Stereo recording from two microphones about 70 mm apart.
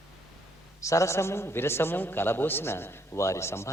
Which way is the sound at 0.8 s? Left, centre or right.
Left.